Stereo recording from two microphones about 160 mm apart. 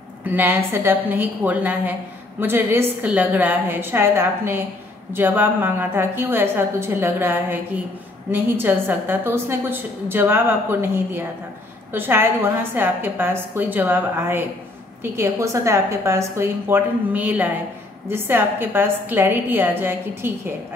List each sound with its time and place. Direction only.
0.2 s a woman's voice: 10° right (ahead or behind)